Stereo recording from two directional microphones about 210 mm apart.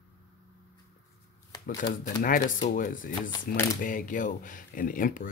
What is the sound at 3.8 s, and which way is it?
Speech, 40° left (ahead or behind).